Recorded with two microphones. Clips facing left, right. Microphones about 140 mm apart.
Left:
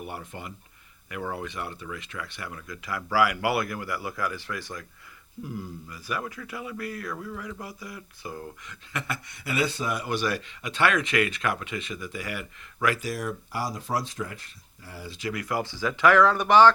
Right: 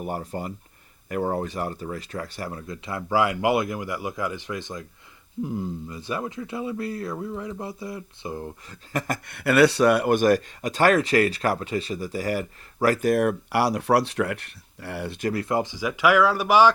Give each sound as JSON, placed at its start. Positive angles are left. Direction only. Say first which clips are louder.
{"t": 0.0, "sound": "speech", "louder": "right 7 dB", "side_deg": -40}
{"t": 9.3, "sound": "speech", "louder": "right 11 dB", "side_deg": -65}
{"t": 13.1, "sound": "speech", "louder": "right 11 dB", "side_deg": -60}
{"t": 15.3, "sound": "speech", "louder": "right 4 dB", "side_deg": -30}